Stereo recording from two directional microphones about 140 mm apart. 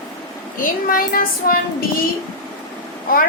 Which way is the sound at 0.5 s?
80° left.